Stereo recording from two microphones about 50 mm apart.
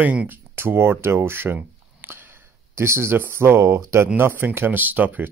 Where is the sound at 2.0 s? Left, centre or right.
Right.